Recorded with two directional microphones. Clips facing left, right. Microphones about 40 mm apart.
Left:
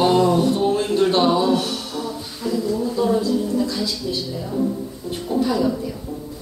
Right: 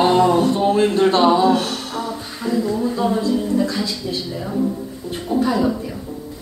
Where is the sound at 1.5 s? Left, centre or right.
Right.